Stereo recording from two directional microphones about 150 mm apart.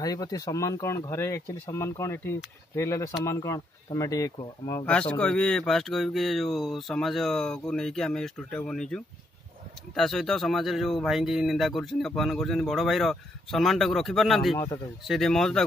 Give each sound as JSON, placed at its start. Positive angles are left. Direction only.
{"t": 0.0, "sound": "speech", "side_deg": 25}
{"t": 5.1, "sound": "speech", "side_deg": 5}